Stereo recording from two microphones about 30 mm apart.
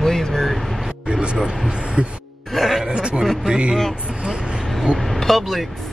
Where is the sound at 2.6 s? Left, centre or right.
Centre.